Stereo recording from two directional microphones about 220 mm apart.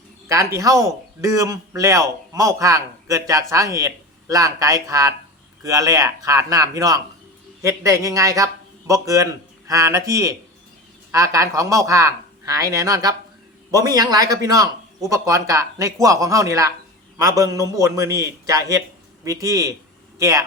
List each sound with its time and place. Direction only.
0.3 s a man's voice: 15° right (ahead or behind)